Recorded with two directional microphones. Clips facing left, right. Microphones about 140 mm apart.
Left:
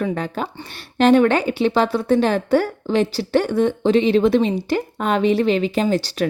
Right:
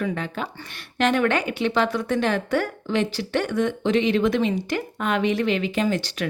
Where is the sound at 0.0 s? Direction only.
35° left (ahead or behind).